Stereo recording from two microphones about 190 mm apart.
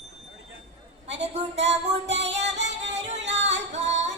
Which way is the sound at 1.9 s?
65° right (ahead or behind).